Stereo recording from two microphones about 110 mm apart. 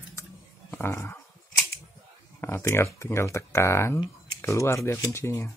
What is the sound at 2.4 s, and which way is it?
Speech, 25° left (ahead or behind).